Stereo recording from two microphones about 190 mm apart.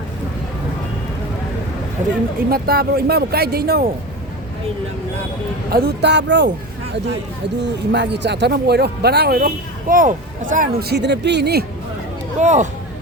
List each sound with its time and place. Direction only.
2.5 s a man's voice: 55° right (ahead or behind)
5.7 s a man's voice: 60° right (ahead or behind)
7.6 s a man's voice: 65° right (ahead or behind)
9.9 s a man's voice: 45° right (ahead or behind); by 11.6 s 60° right (ahead or behind)
12.4 s speech: 40° right (ahead or behind)